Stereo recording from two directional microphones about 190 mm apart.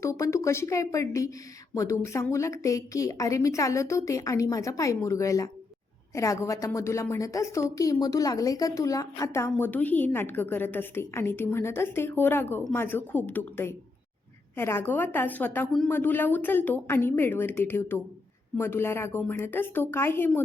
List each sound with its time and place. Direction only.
0.0 s a woman's voice: 15° left (ahead or behind)